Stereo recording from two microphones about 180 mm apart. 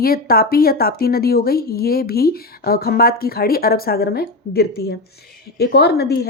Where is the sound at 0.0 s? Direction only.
55° left (ahead or behind).